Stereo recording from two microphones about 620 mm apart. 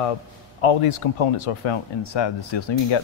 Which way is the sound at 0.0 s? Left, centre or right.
Left.